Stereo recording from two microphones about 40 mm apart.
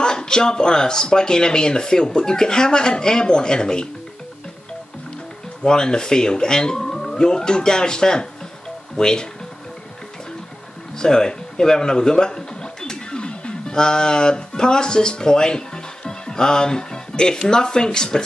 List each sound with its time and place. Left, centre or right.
0.0 s speech: centre
5.6 s speech: centre
11.0 s a man's voice: centre